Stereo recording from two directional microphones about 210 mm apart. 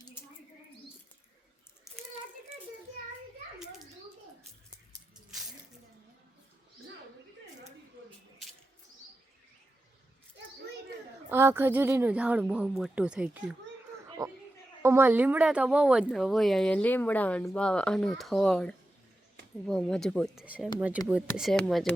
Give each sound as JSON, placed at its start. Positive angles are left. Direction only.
{"t": 11.3, "sound": "speech", "side_deg": -10}
{"t": 14.2, "sound": "a sound", "side_deg": -15}
{"t": 14.8, "sound": "speech", "side_deg": -10}